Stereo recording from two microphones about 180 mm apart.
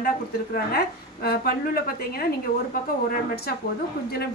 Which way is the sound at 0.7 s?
60° left (ahead or behind).